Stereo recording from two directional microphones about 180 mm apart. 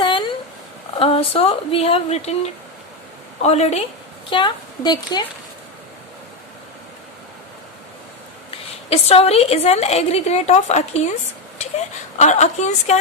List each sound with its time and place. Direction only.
0.0 s dog: 30° left (ahead or behind)
0.9 s a woman's voice: 30° left (ahead or behind)
8.4 s a woman's voice: 35° left (ahead or behind)
12.1 s a woman's voice: 40° left (ahead or behind)